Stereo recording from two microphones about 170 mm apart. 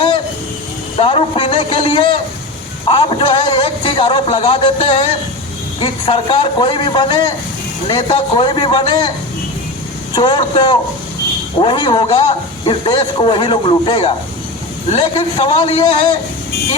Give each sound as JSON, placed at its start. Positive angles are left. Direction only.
{"t": 0.9, "sound": "a man's voice", "side_deg": 35}
{"t": 10.2, "sound": "a man's voice", "side_deg": 25}